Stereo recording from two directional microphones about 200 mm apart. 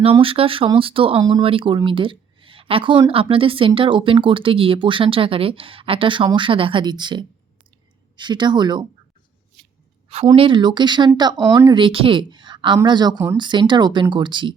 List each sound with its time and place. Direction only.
0.2 s speech: 25° right (ahead or behind)
10.2 s speech: 25° right (ahead or behind)